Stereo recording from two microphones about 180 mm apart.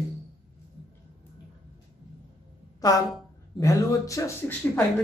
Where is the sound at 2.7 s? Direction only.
20° left (ahead or behind).